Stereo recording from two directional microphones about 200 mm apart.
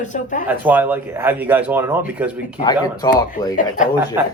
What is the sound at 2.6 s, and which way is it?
Speech, 20° left (ahead or behind).